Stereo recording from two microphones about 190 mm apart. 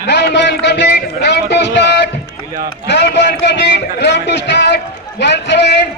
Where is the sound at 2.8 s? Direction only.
65° left (ahead or behind).